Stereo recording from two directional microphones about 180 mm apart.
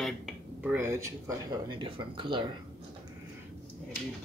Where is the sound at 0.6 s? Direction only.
10° right (ahead or behind); by 2.5 s 25° right (ahead or behind).